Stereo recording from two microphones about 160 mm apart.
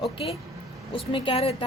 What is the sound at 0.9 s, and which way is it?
Speech, 35° left (ahead or behind).